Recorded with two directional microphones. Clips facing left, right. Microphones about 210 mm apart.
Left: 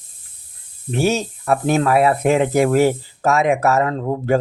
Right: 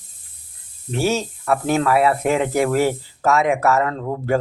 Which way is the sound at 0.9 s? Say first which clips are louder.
Left 2 dB; 20° left (ahead or behind).